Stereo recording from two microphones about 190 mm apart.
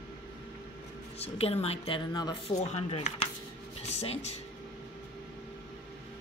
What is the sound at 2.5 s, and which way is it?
Speech, 35° left (ahead or behind).